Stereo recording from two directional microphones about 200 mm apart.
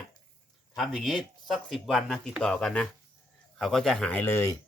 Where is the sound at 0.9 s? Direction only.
Centre (ahead or behind).